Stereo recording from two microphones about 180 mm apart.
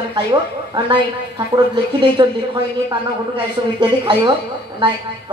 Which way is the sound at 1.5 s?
25° right (ahead or behind).